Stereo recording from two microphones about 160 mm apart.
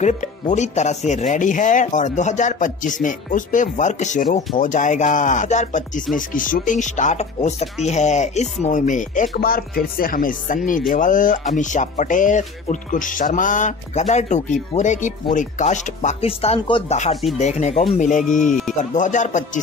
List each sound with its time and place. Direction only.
0.0 s speech: 50° left (ahead or behind); by 16.8 s 35° left (ahead or behind)
17.4 s speech: 45° left (ahead or behind)